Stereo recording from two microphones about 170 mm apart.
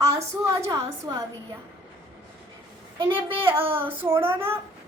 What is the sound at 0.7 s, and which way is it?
Speech, 20° right (ahead or behind).